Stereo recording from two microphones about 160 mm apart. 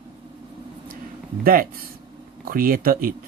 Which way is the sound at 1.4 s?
65° right (ahead or behind).